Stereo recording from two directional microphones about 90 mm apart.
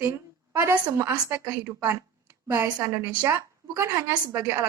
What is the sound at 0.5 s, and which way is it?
A woman's voice, 30° right (ahead or behind).